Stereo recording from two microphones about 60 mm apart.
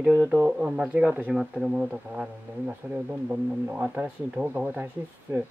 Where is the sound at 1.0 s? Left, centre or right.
Right.